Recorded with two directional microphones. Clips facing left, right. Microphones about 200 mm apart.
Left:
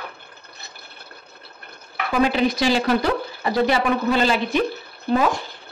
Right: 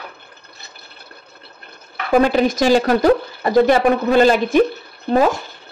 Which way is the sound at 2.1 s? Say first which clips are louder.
Right 5 dB; 45° right (ahead or behind).